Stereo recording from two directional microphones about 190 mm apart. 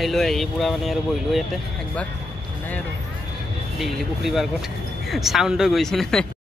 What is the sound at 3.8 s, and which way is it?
Speech, centre (ahead or behind).